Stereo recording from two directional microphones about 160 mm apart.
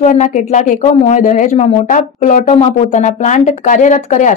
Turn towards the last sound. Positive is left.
turn(degrees=50)  # may be behind; listen again after turning